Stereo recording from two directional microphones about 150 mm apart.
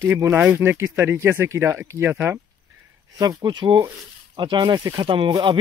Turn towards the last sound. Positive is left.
turn(degrees=-30)  # may be behind; listen again after turning